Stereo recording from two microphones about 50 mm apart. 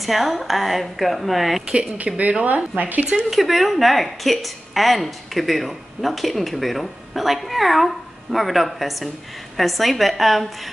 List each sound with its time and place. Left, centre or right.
0.0 s a woman's voice: centre
1.7 s speech: right
3.3 s a woman's voice: centre